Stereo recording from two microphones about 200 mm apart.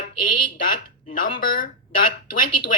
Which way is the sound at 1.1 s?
45° left (ahead or behind).